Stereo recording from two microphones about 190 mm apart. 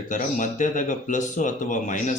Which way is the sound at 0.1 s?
40° left (ahead or behind).